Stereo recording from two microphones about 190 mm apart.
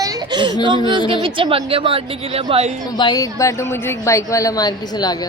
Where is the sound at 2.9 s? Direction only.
20° left (ahead or behind).